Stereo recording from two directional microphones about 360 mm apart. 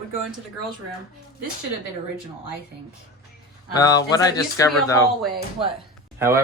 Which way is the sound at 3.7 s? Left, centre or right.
Centre.